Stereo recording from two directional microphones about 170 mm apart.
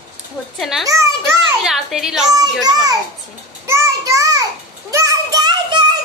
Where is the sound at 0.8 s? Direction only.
15° right (ahead or behind).